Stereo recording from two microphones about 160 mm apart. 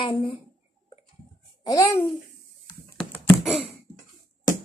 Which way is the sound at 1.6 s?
20° left (ahead or behind).